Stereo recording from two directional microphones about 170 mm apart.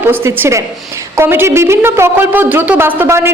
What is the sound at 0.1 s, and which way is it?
A woman's voice, 15° right (ahead or behind).